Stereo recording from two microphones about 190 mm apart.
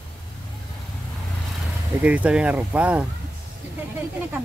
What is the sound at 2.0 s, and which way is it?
Speech, 5° right (ahead or behind).